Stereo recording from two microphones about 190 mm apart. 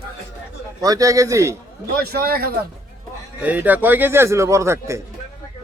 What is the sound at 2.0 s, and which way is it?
Speech, 55° right (ahead or behind).